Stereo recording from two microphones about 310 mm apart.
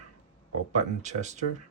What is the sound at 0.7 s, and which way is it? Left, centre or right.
Speech, right.